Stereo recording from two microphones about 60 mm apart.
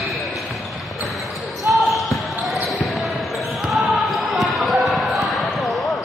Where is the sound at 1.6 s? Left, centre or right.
Centre.